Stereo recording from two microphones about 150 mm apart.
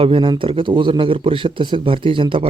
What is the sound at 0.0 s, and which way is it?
Speech, 35° right (ahead or behind).